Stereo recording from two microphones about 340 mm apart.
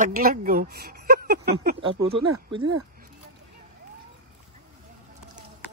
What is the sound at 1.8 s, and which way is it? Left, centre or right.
Speech, centre.